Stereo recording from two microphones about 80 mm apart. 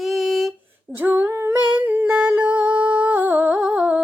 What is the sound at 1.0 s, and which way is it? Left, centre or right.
Female singing, right.